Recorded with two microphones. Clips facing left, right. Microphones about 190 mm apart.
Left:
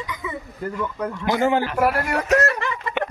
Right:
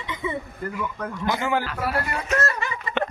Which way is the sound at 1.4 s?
20° left (ahead or behind).